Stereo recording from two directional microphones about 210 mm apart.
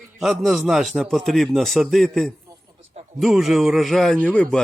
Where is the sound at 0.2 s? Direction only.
Centre (ahead or behind).